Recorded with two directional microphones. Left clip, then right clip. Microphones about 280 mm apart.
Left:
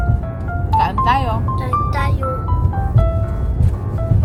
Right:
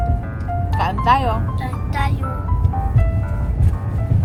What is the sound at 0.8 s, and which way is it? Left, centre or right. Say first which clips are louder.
Speech: left 2 dB; centre.